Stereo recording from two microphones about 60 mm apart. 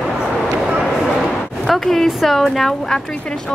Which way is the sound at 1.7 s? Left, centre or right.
Centre.